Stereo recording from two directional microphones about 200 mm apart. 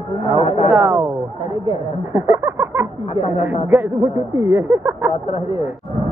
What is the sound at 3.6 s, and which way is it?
Speech, 10° right (ahead or behind).